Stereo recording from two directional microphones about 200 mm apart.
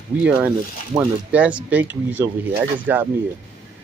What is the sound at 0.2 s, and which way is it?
Speech, 5° right (ahead or behind).